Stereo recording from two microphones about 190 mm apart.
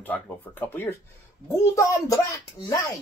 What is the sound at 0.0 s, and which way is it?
Speech, 10° left (ahead or behind).